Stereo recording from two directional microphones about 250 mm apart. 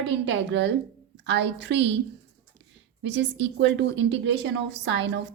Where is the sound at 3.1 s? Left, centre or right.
Right.